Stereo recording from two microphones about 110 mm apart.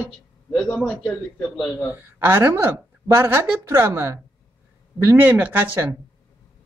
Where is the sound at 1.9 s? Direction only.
20° right (ahead or behind).